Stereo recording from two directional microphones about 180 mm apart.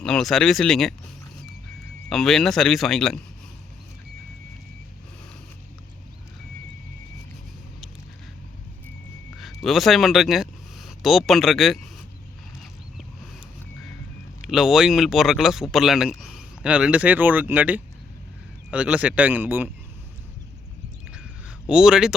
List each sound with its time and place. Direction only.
0.0 s speech: 5° left (ahead or behind)
2.0 s speech: centre (ahead or behind)
9.6 s speech: centre (ahead or behind)
14.4 s speech: centre (ahead or behind)
21.1 s a sound: 5° right (ahead or behind)